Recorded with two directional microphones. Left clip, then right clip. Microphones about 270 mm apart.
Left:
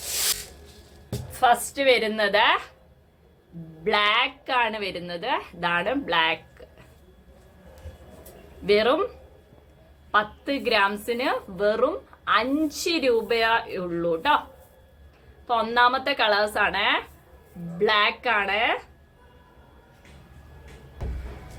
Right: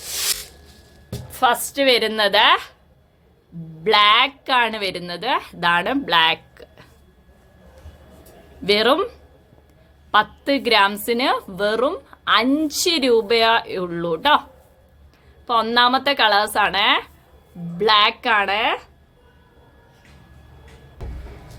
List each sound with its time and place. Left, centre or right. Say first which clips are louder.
1.3 s speech: right 2 dB; right
3.8 s speech: right 7 dB; right
8.6 s speech: right 4 dB; right
10.1 s speech: right 6 dB; right
15.4 s speech: right 4 dB; right